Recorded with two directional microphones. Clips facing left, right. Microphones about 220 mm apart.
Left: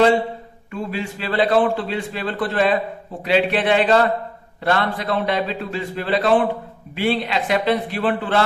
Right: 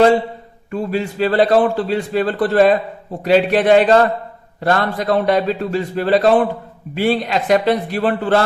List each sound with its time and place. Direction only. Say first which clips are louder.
0.7 s a man's voice: right 6 dB; 40° right (ahead or behind)